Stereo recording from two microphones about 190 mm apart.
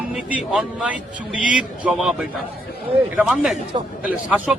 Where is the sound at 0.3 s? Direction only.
5° right (ahead or behind).